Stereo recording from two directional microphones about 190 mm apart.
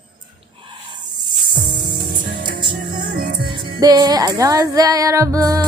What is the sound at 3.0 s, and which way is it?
Music, 50° right (ahead or behind).